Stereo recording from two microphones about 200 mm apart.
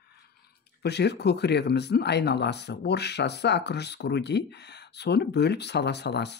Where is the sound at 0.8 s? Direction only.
55° left (ahead or behind).